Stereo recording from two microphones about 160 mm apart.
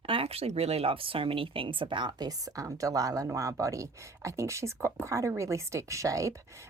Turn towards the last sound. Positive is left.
turn(degrees=-20)  # may be behind; listen again after turning